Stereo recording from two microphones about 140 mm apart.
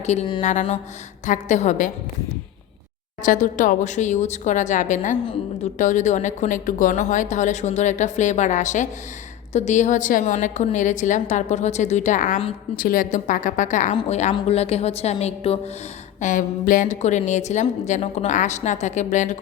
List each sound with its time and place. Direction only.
0.0 s a woman's voice: 55° left (ahead or behind)
3.2 s a woman's voice: 65° left (ahead or behind)
12.7 s a woman's voice: 75° left (ahead or behind); by 15.5 s 50° left (ahead or behind)
16.2 s a woman's voice: 70° left (ahead or behind)